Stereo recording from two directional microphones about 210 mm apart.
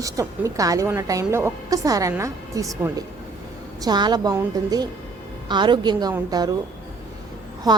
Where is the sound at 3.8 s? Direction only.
20° right (ahead or behind).